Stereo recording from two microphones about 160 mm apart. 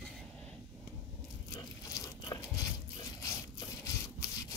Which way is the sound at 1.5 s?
20° left (ahead or behind).